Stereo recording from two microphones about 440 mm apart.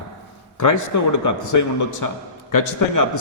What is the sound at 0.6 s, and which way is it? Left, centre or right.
A man's voice, left.